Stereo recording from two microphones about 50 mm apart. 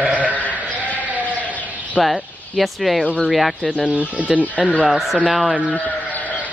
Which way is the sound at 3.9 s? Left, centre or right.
Right.